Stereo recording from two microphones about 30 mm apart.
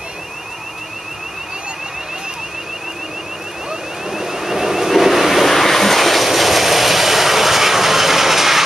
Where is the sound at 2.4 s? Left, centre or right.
Centre.